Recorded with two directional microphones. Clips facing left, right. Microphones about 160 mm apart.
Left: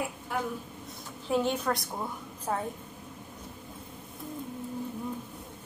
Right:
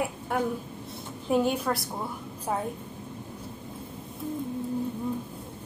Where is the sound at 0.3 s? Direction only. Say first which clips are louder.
Right 5 dB; 55° right (ahead or behind).